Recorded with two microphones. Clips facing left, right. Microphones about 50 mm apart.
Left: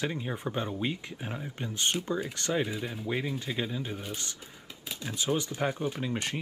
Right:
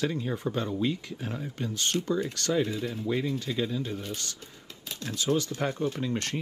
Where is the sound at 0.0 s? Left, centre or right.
Centre.